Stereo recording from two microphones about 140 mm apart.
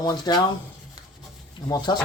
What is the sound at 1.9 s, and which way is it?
Speech, 30° left (ahead or behind).